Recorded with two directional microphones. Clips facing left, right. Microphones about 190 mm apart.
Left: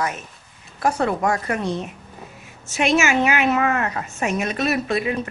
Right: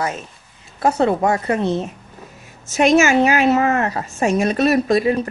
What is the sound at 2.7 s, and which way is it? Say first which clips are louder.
A woman's voice: right 5 dB; 40° right (ahead or behind).